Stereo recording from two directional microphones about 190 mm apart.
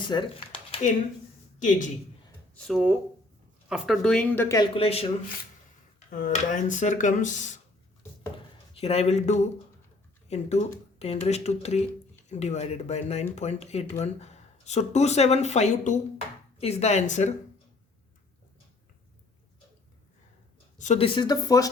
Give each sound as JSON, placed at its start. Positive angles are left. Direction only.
{"t": 0.0, "sound": "a sound", "side_deg": 25}
{"t": 1.5, "sound": "a woman's voice", "side_deg": 40}
{"t": 2.6, "sound": "speech", "side_deg": -5}
{"t": 4.7, "sound": "speech", "side_deg": 30}
{"t": 6.1, "sound": "speech", "side_deg": 40}
{"t": 8.7, "sound": "a man's voice", "side_deg": 30}
{"t": 20.7, "sound": "a woman's voice", "side_deg": 40}
{"t": 21.2, "sound": "speech", "side_deg": 20}